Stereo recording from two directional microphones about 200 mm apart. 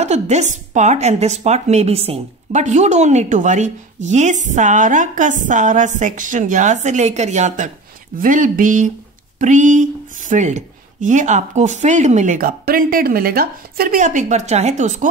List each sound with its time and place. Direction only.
0.0 s a woman's voice: 35° right (ahead or behind)